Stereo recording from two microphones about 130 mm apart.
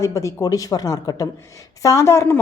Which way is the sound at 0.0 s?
25° left (ahead or behind).